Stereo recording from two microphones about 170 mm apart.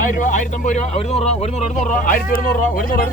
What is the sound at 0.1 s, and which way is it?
Speech, 50° left (ahead or behind).